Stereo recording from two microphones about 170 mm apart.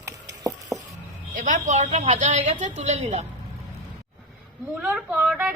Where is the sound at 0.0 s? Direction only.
20° right (ahead or behind).